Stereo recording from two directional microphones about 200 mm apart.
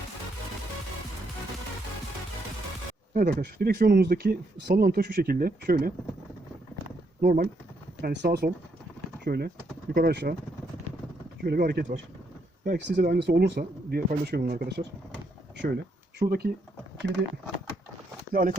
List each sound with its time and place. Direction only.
3.2 s speech: 45° right (ahead or behind)
7.2 s speech: 50° right (ahead or behind)
11.4 s speech: 55° right (ahead or behind)
15.5 s speech: 60° right (ahead or behind)
18.3 s speech: 45° right (ahead or behind)